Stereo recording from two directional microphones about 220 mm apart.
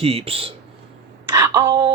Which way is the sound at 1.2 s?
15° right (ahead or behind).